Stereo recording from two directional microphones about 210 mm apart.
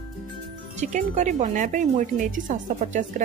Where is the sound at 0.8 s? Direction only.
35° right (ahead or behind).